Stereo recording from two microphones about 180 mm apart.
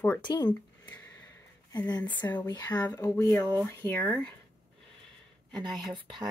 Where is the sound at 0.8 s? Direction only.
5° left (ahead or behind).